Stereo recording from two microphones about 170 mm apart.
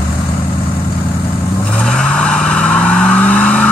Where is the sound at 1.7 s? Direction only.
5° left (ahead or behind).